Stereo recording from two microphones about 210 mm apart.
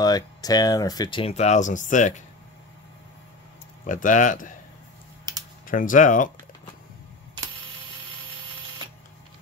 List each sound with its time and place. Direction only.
0.0 s speech: 20° left (ahead or behind); by 2.2 s 35° left (ahead or behind)
3.8 s speech: 35° left (ahead or behind)
5.7 s speech: 40° left (ahead or behind)